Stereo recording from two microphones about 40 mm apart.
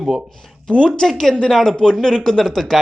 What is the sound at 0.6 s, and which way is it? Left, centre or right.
Speech, left.